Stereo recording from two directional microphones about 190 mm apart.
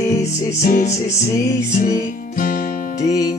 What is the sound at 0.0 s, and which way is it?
Music, 15° left (ahead or behind).